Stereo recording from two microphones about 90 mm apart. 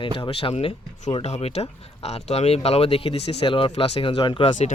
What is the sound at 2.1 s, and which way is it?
Speech, 90° left.